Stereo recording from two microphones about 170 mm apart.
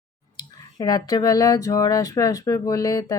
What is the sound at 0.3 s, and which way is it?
Speech, 20° left (ahead or behind).